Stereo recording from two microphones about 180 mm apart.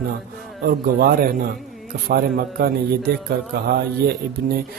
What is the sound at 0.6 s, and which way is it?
Speech, 55° right (ahead or behind).